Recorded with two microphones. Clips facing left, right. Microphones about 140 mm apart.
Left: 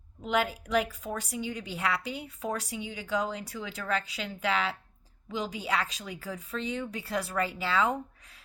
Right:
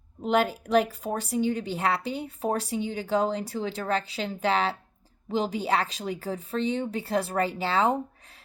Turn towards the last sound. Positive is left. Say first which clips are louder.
# right 4 dB
turn(degrees=-30)  # may be behind; listen again after turning